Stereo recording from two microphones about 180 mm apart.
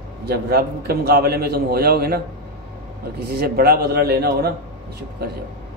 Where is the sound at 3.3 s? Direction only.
60° right (ahead or behind).